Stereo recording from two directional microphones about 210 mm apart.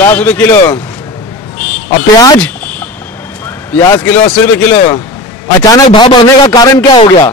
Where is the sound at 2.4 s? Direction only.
5° left (ahead or behind).